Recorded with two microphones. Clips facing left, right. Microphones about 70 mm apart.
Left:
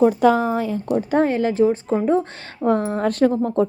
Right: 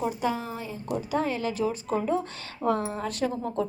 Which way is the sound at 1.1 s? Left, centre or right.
Left.